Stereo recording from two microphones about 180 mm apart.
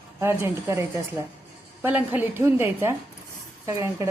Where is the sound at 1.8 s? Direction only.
10° right (ahead or behind).